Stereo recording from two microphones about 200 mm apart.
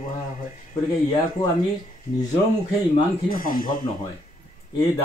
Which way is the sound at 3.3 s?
45° left (ahead or behind).